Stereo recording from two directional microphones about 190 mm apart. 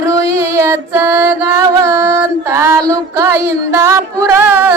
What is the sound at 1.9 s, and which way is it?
Female singing, 15° right (ahead or behind).